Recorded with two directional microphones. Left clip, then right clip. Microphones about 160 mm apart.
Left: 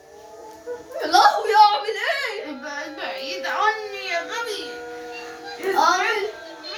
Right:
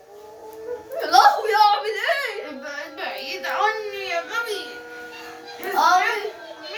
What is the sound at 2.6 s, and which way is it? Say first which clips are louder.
Music: even; 20° right (ahead or behind).